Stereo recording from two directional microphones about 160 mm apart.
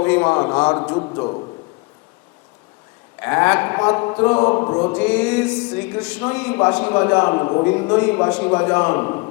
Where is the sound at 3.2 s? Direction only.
15° left (ahead or behind).